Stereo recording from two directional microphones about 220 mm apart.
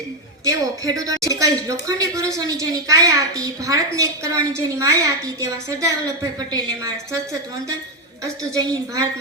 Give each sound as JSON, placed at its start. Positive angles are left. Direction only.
{"t": 0.4, "sound": "a woman's voice", "side_deg": -15}